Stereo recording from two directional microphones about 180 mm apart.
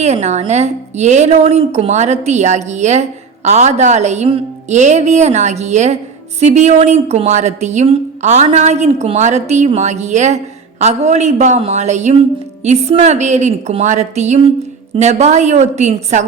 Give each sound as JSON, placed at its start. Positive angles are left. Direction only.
{"t": 0.0, "sound": "a woman's voice", "side_deg": -40}